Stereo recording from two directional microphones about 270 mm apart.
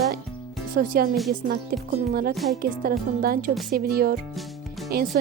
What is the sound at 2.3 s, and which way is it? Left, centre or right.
Speech, centre.